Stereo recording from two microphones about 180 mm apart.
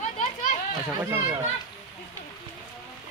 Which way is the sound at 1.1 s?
20° right (ahead or behind).